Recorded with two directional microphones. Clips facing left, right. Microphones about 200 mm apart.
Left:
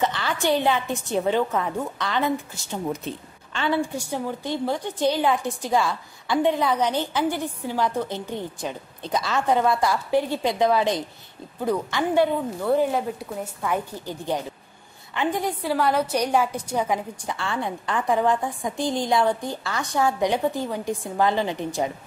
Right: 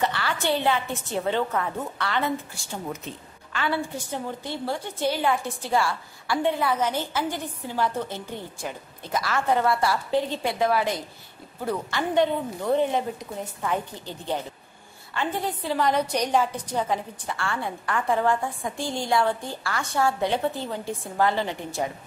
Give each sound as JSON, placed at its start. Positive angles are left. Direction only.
{"t": 0.0, "sound": "a woman's voice", "side_deg": 20}